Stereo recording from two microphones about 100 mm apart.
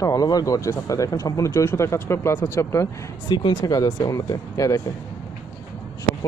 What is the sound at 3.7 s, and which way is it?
Speech, 40° left (ahead or behind).